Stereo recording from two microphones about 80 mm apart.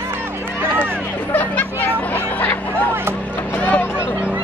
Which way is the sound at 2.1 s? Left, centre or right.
Left.